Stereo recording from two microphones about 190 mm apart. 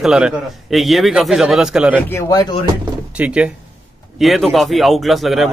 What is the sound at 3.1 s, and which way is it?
A man's voice, 5° right (ahead or behind).